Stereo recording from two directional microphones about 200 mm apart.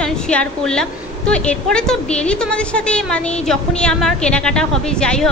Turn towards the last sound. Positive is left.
turn(degrees=5)  # may be behind; listen again after turning